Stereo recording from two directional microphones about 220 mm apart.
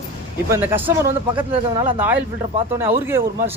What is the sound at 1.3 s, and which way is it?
Speech, 20° right (ahead or behind).